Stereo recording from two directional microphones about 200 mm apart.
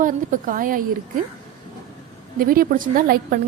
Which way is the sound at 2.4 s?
45° right (ahead or behind).